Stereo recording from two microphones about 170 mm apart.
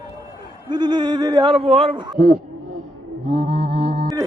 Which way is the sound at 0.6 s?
25° right (ahead or behind).